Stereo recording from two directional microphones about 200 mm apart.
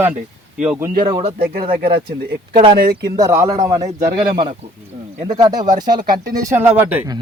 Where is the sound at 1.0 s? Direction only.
25° right (ahead or behind).